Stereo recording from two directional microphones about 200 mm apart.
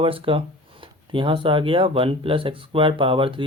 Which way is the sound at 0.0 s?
25° right (ahead or behind).